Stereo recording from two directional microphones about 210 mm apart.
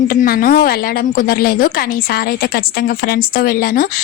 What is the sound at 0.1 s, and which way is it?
A woman's voice, 40° left (ahead or behind).